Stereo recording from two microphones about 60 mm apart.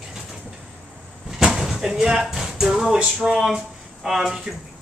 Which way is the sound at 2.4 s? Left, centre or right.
Centre.